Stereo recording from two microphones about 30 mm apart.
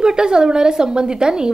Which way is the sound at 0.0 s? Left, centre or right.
Right.